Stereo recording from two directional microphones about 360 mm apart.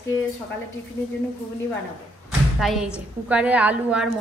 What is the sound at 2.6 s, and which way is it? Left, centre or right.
A woman's voice, centre.